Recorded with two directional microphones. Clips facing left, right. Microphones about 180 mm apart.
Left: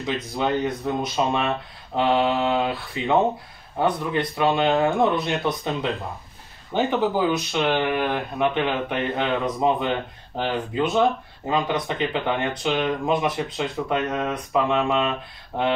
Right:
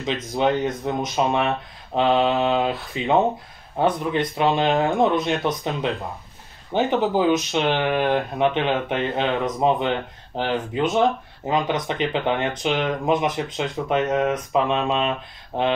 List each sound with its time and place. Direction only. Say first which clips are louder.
0.3 s speech: right 3 dB; 20° right (ahead or behind)